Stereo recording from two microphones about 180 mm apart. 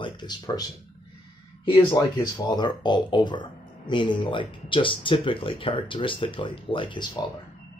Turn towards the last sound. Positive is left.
turn(degrees=25)  # may be behind; listen again after turning